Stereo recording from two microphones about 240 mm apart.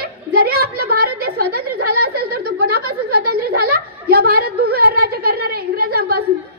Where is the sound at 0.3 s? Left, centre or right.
Right.